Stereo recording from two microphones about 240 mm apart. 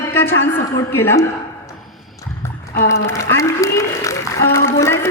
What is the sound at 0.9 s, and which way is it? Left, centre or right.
Speech, centre.